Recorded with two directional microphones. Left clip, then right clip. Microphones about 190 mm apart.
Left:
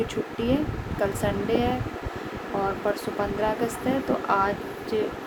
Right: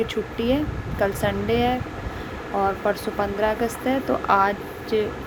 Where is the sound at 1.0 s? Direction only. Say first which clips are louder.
Right 3 dB; 15° right (ahead or behind).